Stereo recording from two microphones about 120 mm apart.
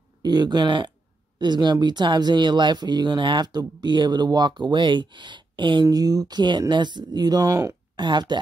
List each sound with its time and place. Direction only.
0.2 s speech: 35° right (ahead or behind)